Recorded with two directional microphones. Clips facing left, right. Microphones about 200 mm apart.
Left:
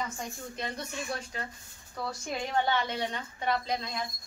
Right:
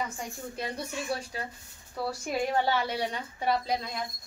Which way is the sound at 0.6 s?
10° right (ahead or behind).